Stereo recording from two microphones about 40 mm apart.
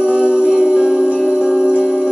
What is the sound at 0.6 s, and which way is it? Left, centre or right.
Music, centre.